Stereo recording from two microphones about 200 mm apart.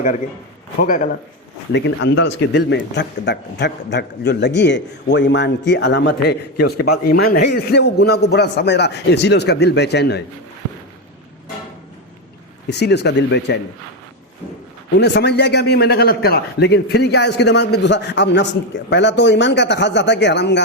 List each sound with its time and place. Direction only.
0.8 s a man's voice: 45° left (ahead or behind)
1.7 s speech: 70° left (ahead or behind); by 10.2 s 55° left (ahead or behind)
12.6 s speech: 55° left (ahead or behind)
14.9 s speech: 60° left (ahead or behind)